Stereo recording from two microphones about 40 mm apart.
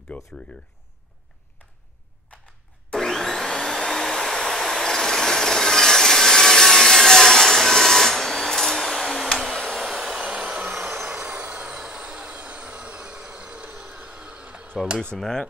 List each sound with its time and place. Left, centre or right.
0.1 s speech: left
2.3 s a sound: left
3.1 s vacuum cleaner: centre
9.8 s hair dryer: centre
10.2 s vehicle: right
11.4 s vehicle: right
11.8 s train: right
14.2 s a sound: right
15.1 s cutlery: centre